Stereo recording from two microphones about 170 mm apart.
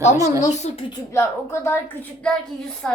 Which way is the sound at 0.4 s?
40° left (ahead or behind).